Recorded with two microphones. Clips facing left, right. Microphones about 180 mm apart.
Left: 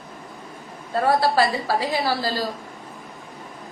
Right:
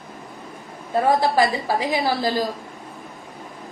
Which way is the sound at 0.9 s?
15° right (ahead or behind).